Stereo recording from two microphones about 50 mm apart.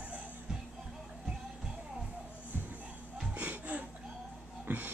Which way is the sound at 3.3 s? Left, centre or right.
Right.